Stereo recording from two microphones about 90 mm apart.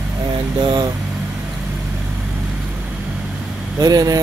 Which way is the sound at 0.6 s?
55° right (ahead or behind).